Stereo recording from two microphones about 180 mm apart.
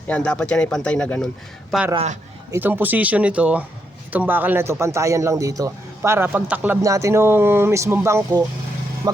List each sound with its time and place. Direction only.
0.1 s speech: 5° left (ahead or behind)
2.5 s a man's voice: 10° right (ahead or behind)